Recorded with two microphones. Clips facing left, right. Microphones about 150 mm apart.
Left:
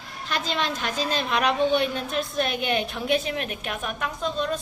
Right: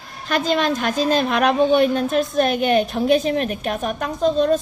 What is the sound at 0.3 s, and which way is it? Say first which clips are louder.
A woman's voice: right 8 dB; 50° right (ahead or behind).